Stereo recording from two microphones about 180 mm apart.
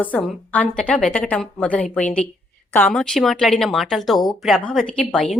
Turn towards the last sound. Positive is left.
turn(degrees=5)  # may be behind; listen again after turning